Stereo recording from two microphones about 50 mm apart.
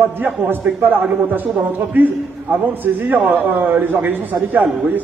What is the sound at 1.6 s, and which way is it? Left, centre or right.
A man's voice, right.